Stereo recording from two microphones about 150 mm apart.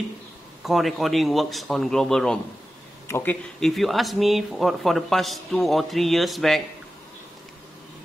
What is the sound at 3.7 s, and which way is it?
Speech, centre (ahead or behind).